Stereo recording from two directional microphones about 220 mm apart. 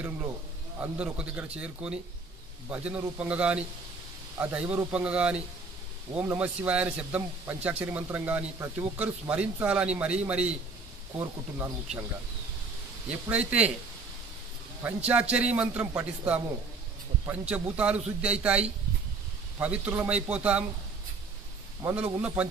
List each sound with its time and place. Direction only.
0.7 s a man's voice: 5° right (ahead or behind)
13.1 s a man's voice: 5° right (ahead or behind)
14.8 s a man's voice: 5° right (ahead or behind)
19.6 s a man's voice: 5° right (ahead or behind)
21.8 s a man's voice: 5° right (ahead or behind)